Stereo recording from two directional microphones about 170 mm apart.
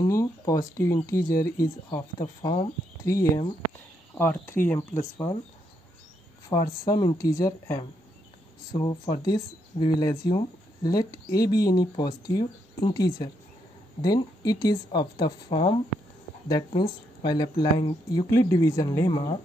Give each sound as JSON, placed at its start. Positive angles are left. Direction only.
{"t": 0.0, "sound": "speech", "side_deg": 20}
{"t": 6.5, "sound": "speech", "side_deg": 20}